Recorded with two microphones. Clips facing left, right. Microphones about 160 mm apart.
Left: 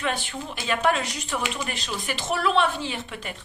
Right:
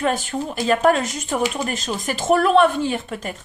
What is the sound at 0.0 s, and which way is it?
A woman's voice, 45° right (ahead or behind).